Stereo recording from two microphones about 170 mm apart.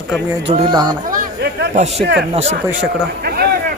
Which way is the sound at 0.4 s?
30° right (ahead or behind).